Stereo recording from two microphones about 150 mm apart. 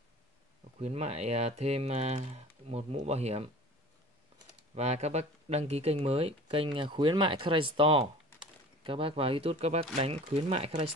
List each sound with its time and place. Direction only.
0.7 s speech: 50° right (ahead or behind)
4.7 s speech: 45° right (ahead or behind)